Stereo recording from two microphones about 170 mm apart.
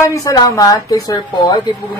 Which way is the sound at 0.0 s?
20° left (ahead or behind).